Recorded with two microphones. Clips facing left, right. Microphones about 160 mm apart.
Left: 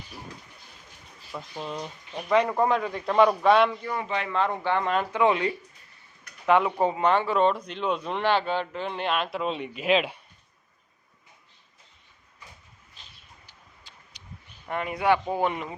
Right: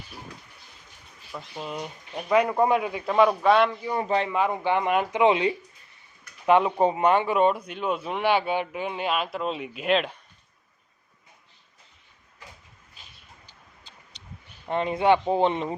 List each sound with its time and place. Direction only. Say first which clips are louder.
1.3 s speech: even; centre (ahead or behind)
3.9 s a man's voice: right 5 dB; 35° right (ahead or behind)
4.3 s speech: right 2 dB; 10° right (ahead or behind)
14.7 s speech: right 3 dB; 25° right (ahead or behind)